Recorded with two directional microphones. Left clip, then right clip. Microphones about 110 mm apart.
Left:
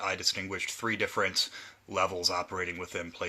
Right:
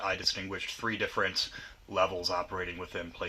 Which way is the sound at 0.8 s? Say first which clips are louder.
Left 1 dB; 60° left (ahead or behind).